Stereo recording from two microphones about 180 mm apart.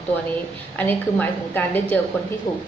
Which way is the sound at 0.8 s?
10° left (ahead or behind).